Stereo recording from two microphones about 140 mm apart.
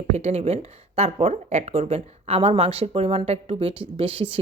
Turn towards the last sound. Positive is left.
turn(degrees=-40)  # may be behind; listen again after turning